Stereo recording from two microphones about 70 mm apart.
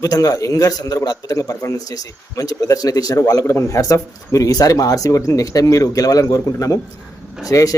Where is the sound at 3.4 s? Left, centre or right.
Left.